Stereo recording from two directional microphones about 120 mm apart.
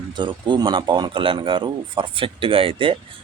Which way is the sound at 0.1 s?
40° right (ahead or behind).